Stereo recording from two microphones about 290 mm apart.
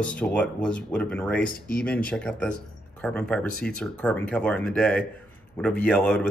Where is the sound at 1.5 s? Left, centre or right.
Left.